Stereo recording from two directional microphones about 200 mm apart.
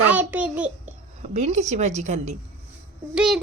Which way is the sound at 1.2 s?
35° right (ahead or behind).